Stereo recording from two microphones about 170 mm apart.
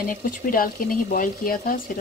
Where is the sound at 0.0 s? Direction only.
55° left (ahead or behind).